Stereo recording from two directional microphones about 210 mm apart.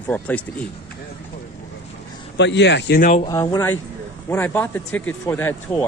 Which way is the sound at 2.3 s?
55° left (ahead or behind).